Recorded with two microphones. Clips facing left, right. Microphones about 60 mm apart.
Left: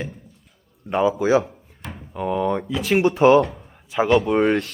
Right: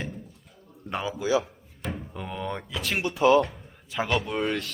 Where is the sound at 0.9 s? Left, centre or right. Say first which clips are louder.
Left 11 dB; centre.